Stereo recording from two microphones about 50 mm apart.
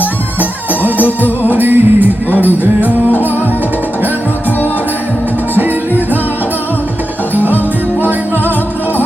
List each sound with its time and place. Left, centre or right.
0.3 s music: right
0.9 s music: left
1.5 s music: right
5.5 s music: right
7.3 s music: right